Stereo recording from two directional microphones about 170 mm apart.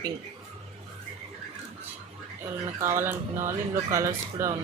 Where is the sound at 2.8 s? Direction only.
15° right (ahead or behind).